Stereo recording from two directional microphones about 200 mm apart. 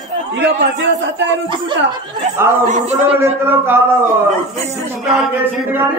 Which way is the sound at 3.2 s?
10° right (ahead or behind).